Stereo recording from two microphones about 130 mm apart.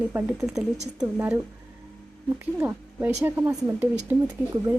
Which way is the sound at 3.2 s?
15° right (ahead or behind).